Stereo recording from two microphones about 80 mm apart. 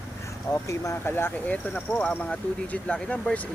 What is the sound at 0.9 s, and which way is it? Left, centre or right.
Speech, left.